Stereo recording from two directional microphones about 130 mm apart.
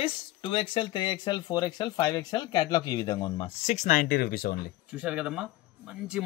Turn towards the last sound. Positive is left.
turn(degrees=-5)  # may be behind; listen again after turning